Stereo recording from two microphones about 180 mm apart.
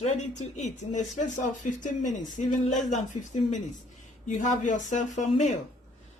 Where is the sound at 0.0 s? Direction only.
40° left (ahead or behind).